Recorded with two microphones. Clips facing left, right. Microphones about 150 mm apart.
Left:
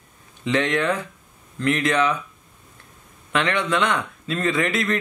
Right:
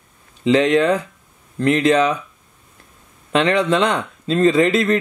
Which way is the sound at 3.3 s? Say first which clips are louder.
Right 6 dB; 30° right (ahead or behind).